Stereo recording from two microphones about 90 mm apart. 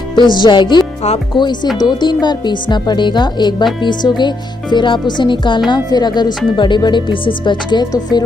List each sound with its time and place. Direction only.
0.1 s speech: 60° left (ahead or behind)
5.7 s speech: 50° left (ahead or behind)